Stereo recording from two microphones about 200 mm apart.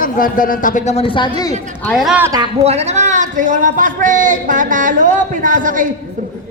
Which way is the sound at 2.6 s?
35° right (ahead or behind).